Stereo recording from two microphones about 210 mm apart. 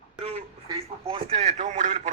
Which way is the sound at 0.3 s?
25° right (ahead or behind).